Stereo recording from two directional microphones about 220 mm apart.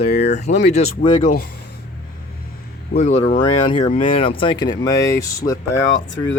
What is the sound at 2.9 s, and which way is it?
Speech, 30° left (ahead or behind).